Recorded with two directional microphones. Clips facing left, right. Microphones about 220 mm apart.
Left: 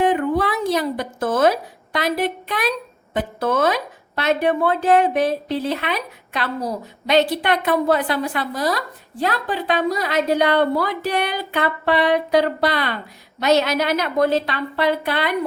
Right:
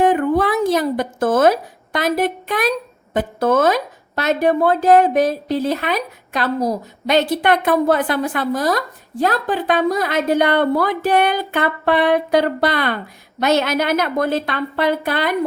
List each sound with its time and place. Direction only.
0.0 s speech: 45° right (ahead or behind)